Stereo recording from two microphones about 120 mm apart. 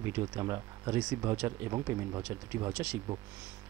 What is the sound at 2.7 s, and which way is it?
Speech, 15° right (ahead or behind).